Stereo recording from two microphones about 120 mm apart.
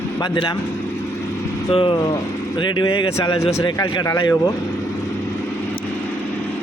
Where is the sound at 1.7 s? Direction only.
50° left (ahead or behind); by 4.4 s 25° left (ahead or behind).